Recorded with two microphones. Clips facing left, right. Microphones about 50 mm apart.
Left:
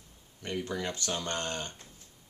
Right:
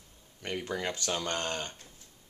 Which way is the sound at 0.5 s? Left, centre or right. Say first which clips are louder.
Even; right.